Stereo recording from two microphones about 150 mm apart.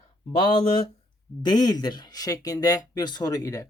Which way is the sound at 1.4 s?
30° left (ahead or behind).